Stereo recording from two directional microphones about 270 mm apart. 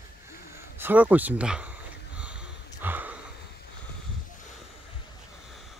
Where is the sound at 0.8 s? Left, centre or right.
Centre.